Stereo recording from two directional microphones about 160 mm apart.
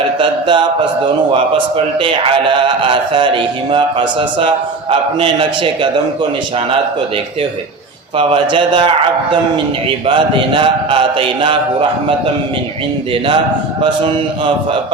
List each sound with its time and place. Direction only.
0.2 s a man's voice: 30° right (ahead or behind)
8.2 s speech: 30° right (ahead or behind)
10.1 s a man's voice: 30° right (ahead or behind)
13.8 s a man's voice: 30° right (ahead or behind)